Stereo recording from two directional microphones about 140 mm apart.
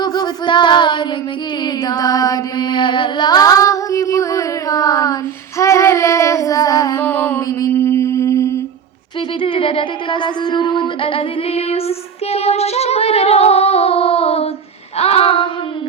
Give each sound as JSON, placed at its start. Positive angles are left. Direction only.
{"t": 0.0, "sound": "female singing", "side_deg": 30}
{"t": 1.6, "sound": "music", "side_deg": 25}
{"t": 5.5, "sound": "child singing", "side_deg": 20}
{"t": 7.0, "sound": "a sound", "side_deg": 10}
{"t": 7.7, "sound": "humming", "side_deg": 15}
{"t": 9.4, "sound": "female singing", "side_deg": 40}